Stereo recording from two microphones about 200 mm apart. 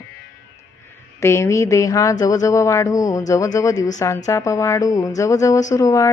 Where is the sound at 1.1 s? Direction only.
15° left (ahead or behind).